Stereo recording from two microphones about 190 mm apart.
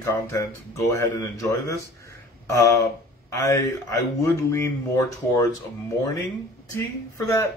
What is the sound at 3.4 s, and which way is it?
Speech, 15° left (ahead or behind).